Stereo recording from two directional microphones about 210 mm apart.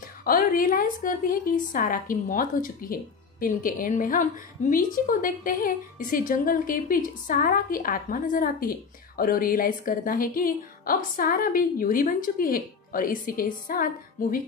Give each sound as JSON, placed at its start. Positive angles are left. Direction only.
{"t": 0.2, "sound": "a woman's voice", "side_deg": 40}